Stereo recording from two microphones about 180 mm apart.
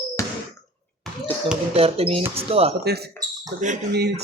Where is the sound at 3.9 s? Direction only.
65° right (ahead or behind).